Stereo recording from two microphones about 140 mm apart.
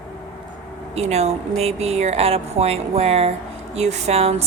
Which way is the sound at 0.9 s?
50° right (ahead or behind).